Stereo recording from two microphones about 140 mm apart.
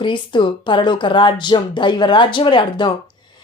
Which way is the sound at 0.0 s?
35° left (ahead or behind).